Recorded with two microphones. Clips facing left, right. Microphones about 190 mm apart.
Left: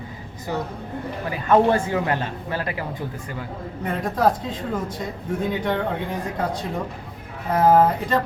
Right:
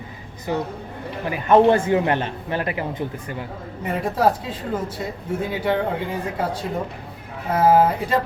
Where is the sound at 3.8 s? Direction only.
10° right (ahead or behind).